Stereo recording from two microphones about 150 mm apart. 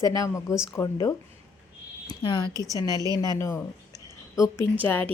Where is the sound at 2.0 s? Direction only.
25° left (ahead or behind).